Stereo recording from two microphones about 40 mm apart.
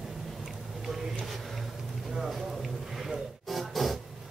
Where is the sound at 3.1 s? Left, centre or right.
Centre.